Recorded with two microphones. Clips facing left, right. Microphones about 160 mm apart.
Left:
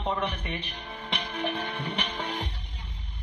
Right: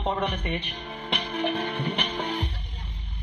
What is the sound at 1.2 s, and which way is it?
Music, 25° right (ahead or behind).